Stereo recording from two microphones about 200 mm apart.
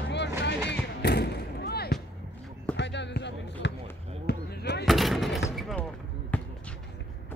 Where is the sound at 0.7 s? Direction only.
55° left (ahead or behind).